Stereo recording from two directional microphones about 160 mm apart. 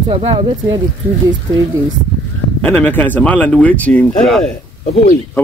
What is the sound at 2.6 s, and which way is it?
Speech, 10° left (ahead or behind).